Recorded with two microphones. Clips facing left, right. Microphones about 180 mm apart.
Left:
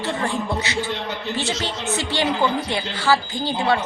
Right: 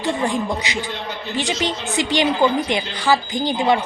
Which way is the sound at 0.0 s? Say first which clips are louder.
Right 3 dB; 15° right (ahead or behind).